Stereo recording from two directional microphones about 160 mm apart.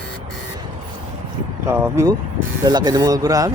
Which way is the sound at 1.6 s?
15° right (ahead or behind).